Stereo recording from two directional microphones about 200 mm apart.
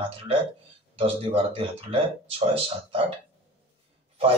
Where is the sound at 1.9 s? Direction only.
30° right (ahead or behind).